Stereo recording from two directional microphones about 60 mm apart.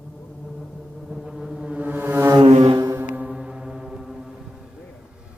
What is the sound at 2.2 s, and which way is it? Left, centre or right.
Foghorn, right.